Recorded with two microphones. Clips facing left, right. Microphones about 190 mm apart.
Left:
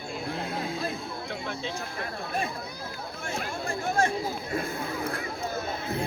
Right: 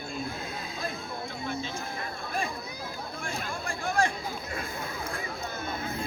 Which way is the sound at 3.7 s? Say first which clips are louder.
Left 1 dB; 20° left (ahead or behind).